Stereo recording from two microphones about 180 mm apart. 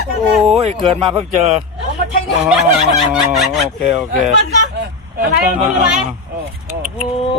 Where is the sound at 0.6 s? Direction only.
35° right (ahead or behind).